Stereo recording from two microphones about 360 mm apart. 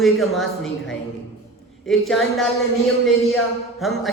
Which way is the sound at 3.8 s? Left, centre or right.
Centre.